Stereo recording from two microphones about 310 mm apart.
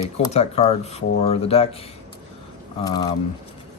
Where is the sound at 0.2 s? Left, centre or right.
Centre.